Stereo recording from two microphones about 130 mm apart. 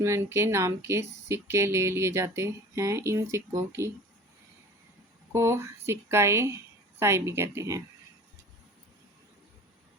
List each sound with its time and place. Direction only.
0.0 s speech: 20° right (ahead or behind)
5.3 s speech: 20° right (ahead or behind)